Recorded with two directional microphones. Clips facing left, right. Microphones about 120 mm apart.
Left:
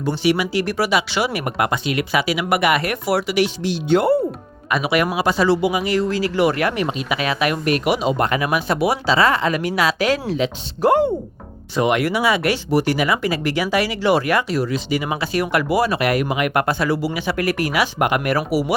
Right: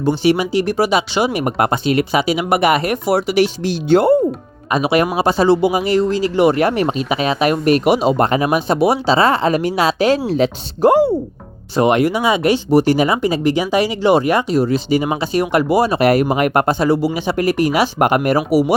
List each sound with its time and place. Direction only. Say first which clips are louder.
0.2 s speech: right 4 dB; 30° right (ahead or behind)
1.5 s speech: right 5 dB; 35° right (ahead or behind)
11.8 s speech: right 4 dB; 35° right (ahead or behind)
12.0 s speech: right 3 dB; 20° right (ahead or behind)